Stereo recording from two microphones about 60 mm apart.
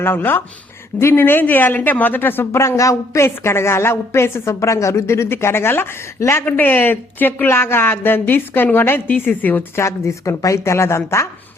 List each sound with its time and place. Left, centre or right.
0.0 s speech: left
6.4 s speech: left
9.7 s speech: left